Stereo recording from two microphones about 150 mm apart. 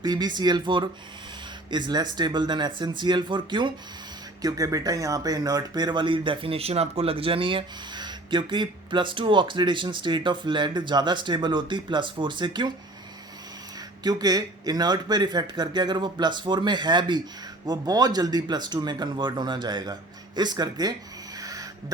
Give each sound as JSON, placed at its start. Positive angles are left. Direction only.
{"t": 0.0, "sound": "speech", "side_deg": -30}
{"t": 14.0, "sound": "speech", "side_deg": -25}
{"t": 21.4, "sound": "a sound", "side_deg": -25}